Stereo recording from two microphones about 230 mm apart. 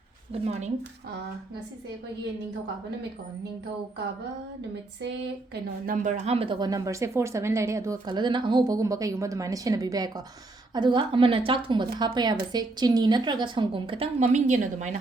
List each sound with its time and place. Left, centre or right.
5.8 s a woman's voice: right